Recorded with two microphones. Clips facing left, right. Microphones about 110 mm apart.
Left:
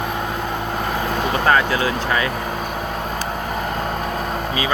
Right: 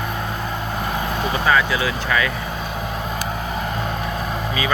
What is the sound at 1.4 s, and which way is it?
Speech, 35° left (ahead or behind).